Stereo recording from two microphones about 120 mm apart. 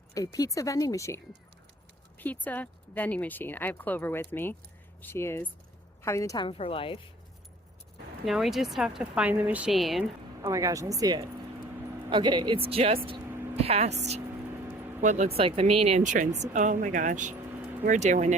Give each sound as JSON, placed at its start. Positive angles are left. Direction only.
{"t": 0.1, "sound": "speech", "side_deg": 30}
{"t": 2.1, "sound": "a woman's voice", "side_deg": 15}
{"t": 6.4, "sound": "a woman's voice", "side_deg": 50}
{"t": 8.2, "sound": "speech", "side_deg": 0}
{"t": 9.7, "sound": "speech", "side_deg": 0}
{"t": 10.5, "sound": "speech", "side_deg": -25}
{"t": 12.6, "sound": "speech", "side_deg": -55}